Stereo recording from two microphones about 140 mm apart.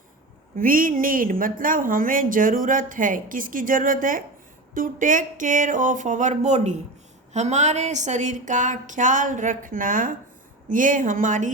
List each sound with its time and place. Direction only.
0.5 s a woman's voice: 85° right; by 11.5 s 65° right (ahead or behind)